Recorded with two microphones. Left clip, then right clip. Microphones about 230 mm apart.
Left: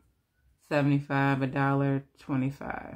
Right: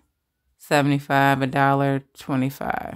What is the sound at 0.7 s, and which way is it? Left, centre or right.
Speech, right.